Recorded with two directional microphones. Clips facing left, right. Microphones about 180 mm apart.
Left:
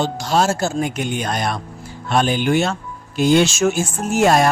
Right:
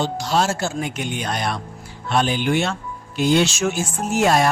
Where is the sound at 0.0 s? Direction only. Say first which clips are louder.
Left 2 dB; 50° left (ahead or behind).